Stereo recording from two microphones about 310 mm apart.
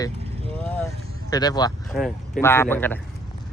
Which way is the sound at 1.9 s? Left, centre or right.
Centre.